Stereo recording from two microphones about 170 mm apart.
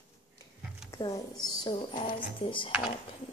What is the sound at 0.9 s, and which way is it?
A woman's voice, 20° left (ahead or behind).